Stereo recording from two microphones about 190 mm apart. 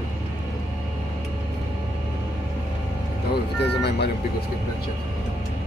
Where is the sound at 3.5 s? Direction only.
60° left (ahead or behind).